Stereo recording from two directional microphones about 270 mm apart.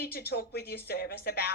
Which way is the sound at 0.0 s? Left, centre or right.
Left.